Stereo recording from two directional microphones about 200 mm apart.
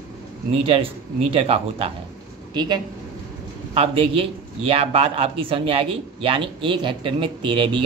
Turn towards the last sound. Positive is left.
turn(degrees=-25)  # may be behind; listen again after turning